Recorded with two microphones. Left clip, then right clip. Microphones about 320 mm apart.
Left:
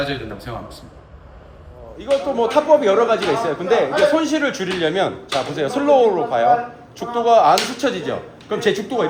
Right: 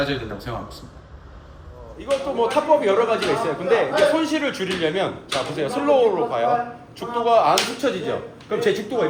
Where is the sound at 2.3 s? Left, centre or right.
Left.